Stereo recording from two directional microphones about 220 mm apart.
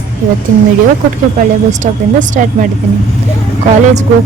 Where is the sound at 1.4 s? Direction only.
35° right (ahead or behind).